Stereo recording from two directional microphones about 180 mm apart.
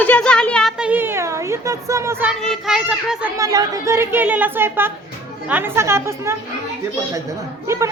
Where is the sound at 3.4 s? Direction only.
20° right (ahead or behind).